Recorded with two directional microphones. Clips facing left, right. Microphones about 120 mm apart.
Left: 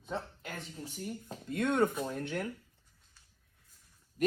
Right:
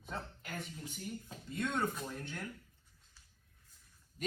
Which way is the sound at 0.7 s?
35° left (ahead or behind).